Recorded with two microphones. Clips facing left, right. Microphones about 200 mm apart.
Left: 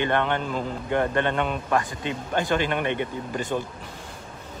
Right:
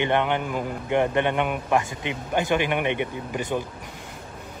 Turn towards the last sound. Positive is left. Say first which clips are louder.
# even
turn(degrees=-15)  # may be behind; listen again after turning